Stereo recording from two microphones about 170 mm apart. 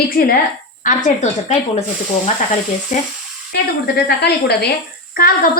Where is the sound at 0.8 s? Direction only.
45° left (ahead or behind).